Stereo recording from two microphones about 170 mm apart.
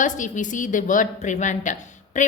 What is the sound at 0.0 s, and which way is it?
A woman's voice, 45° left (ahead or behind).